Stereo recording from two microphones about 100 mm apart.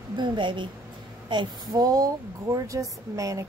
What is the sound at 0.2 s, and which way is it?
A woman's voice, 55° right (ahead or behind).